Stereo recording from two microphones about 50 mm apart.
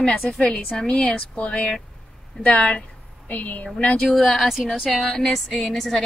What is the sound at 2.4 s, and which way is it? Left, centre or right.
A woman's voice, left.